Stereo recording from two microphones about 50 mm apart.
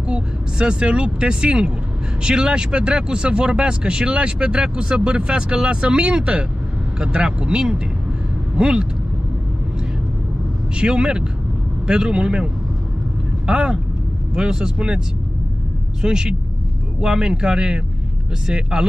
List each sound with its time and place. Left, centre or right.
0.1 s speech: centre
10.8 s speech: centre
13.5 s speech: centre
16.0 s speech: centre